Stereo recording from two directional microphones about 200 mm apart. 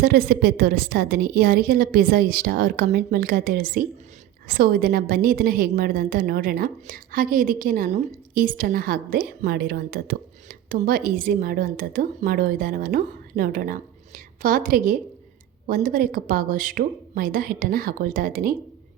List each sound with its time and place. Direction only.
0.0 s a woman's voice: 50° right (ahead or behind)